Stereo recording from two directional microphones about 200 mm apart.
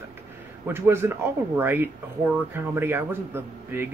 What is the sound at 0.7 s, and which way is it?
Speech, 10° right (ahead or behind).